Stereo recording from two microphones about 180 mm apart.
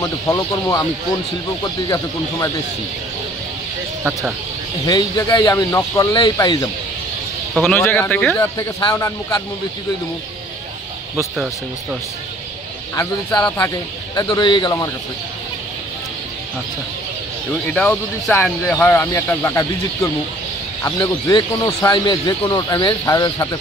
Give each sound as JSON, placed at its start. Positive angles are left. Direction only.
{"t": 0.0, "sound": "speech", "side_deg": 15}
{"t": 4.8, "sound": "speech", "side_deg": 20}
{"t": 7.5, "sound": "speech", "side_deg": 0}
{"t": 8.5, "sound": "speech", "side_deg": 20}
{"t": 11.3, "sound": "speech", "side_deg": -5}
{"t": 12.9, "sound": "speech", "side_deg": 20}
{"t": 17.7, "sound": "speech", "side_deg": 5}